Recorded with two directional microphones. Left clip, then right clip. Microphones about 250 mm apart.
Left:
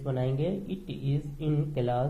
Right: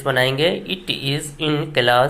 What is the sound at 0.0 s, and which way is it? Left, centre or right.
A woman's voice, right.